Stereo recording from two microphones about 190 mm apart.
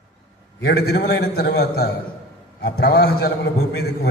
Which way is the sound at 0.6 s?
55° left (ahead or behind).